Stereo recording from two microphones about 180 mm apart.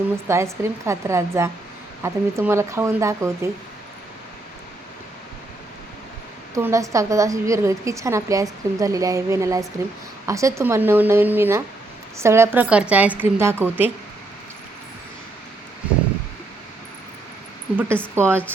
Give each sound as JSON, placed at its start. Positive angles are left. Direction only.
{"t": 0.3, "sound": "a woman's voice", "side_deg": -15}
{"t": 6.5, "sound": "a woman's voice", "side_deg": -15}
{"t": 17.7, "sound": "a woman's voice", "side_deg": -10}